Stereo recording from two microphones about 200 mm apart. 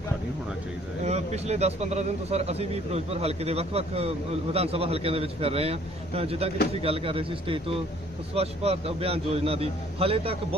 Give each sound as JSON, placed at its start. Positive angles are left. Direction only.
{"t": 1.0, "sound": "a man's voice", "side_deg": -35}